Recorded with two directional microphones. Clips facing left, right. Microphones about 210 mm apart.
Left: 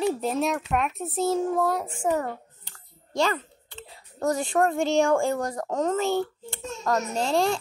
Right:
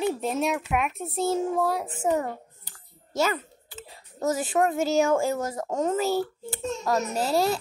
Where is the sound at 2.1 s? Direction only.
10° right (ahead or behind).